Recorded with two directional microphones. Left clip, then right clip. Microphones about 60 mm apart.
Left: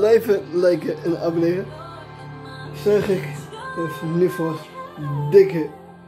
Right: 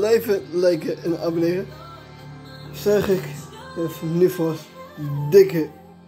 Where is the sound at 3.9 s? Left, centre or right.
Left.